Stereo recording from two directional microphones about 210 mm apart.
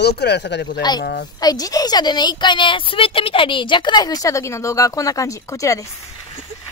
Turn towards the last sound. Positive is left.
turn(degrees=15)  # may be behind; listen again after turning